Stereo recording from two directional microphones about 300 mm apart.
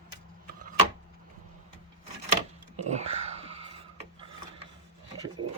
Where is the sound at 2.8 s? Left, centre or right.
Right.